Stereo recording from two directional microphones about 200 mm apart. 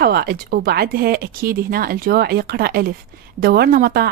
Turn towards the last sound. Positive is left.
turn(degrees=-50)  # may be behind; listen again after turning